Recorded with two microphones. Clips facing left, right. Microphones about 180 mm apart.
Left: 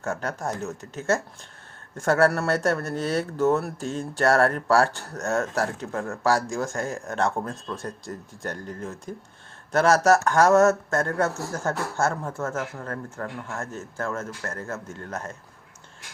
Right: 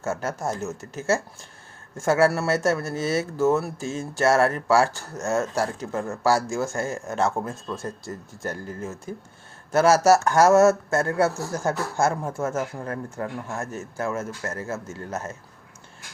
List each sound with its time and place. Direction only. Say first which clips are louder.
0.0 s speech: right 2 dB; 5° right (ahead or behind)